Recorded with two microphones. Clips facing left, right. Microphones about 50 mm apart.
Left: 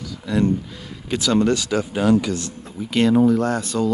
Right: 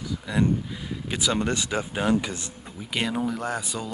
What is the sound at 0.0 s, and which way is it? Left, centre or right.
Speech, centre.